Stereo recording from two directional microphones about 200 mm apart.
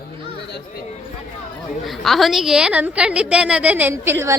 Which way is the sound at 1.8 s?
Centre (ahead or behind).